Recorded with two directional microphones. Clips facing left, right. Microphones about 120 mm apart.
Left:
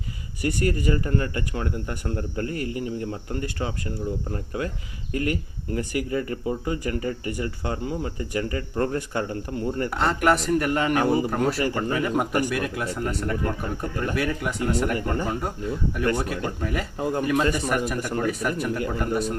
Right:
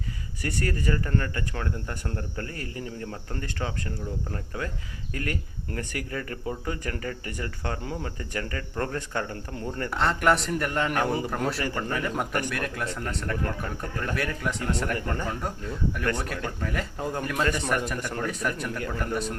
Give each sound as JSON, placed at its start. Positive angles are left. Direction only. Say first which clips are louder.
{"t": 0.4, "sound": "speech", "louder": "left 5 dB", "side_deg": 15}
{"t": 5.1, "sound": "a man's voice", "louder": "left 6 dB", "side_deg": 15}